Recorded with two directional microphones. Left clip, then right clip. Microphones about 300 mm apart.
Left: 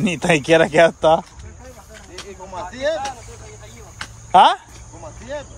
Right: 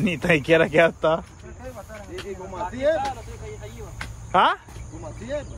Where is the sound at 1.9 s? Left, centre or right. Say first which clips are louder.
Even; left.